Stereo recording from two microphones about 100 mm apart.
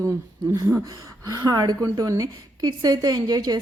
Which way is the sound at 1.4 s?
40° right (ahead or behind).